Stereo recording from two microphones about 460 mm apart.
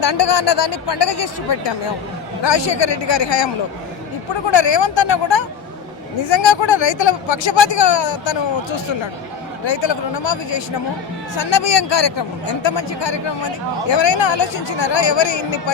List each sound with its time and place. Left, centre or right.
0.0 s speech: left
4.5 s speech: left
9.6 s speech: left